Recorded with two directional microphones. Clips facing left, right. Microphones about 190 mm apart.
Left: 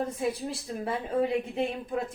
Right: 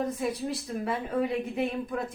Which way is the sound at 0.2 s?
25° left (ahead or behind).